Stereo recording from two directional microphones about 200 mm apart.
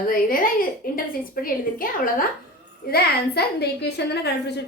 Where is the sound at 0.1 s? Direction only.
45° left (ahead or behind).